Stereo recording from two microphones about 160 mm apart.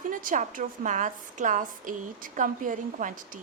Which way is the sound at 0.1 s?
55° right (ahead or behind).